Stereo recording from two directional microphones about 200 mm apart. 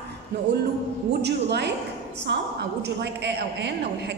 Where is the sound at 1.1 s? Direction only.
55° right (ahead or behind).